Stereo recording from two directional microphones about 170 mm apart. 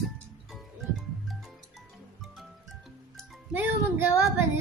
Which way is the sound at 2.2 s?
Centre (ahead or behind).